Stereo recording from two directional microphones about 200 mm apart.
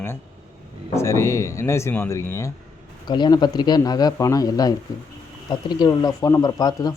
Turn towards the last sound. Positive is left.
turn(degrees=20)  # may be behind; listen again after turning